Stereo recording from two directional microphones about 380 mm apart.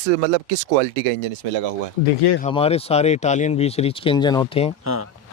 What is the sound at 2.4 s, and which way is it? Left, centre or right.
Speech, centre.